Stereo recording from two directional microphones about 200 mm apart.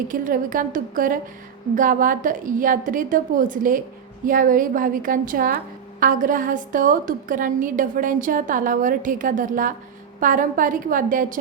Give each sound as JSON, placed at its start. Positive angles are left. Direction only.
{"t": 0.1, "sound": "a woman's voice", "side_deg": -40}